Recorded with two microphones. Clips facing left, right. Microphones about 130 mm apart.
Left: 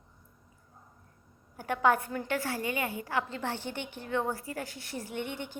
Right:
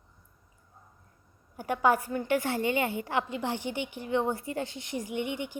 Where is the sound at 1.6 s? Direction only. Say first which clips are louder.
Right 1 dB; 10° right (ahead or behind).